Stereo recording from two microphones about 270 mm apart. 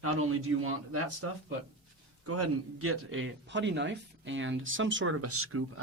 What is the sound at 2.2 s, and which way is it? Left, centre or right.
A man's voice, right.